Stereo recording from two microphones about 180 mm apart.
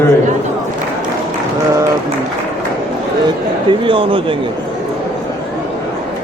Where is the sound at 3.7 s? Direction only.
30° right (ahead or behind).